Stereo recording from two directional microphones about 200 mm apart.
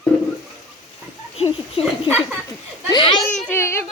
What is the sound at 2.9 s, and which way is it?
Speech, 25° left (ahead or behind).